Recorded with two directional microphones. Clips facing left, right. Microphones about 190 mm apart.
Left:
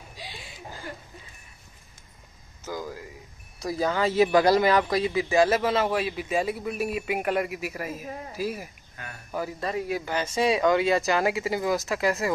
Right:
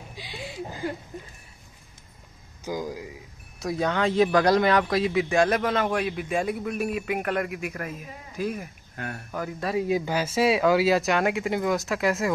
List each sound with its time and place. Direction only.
2.6 s speech: 15° right (ahead or behind)
3.5 s speech: centre (ahead or behind)
8.0 s speech: 40° left (ahead or behind)
8.4 s speech: 5° left (ahead or behind)
8.9 s speech: 65° right (ahead or behind)
9.3 s speech: 5° left (ahead or behind)
9.8 s speech: 15° right (ahead or behind); by 12.4 s centre (ahead or behind)